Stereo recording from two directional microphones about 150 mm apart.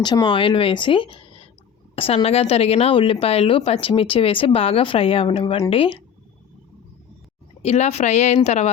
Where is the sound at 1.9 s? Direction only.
40° left (ahead or behind).